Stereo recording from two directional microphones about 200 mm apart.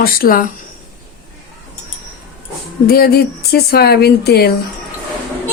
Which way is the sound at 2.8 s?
50° left (ahead or behind).